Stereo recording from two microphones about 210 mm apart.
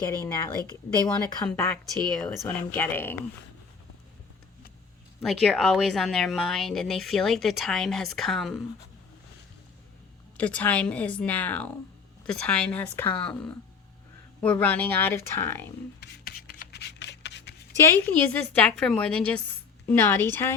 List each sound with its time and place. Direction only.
0.7 s speech: 20° left (ahead or behind)
1.5 s speech: 5° left (ahead or behind)
5.2 s a woman's voice: centre (ahead or behind)
10.3 s a woman's voice: 5° left (ahead or behind)
16.0 s rub: 45° left (ahead or behind)
17.7 s speech: 10° left (ahead or behind)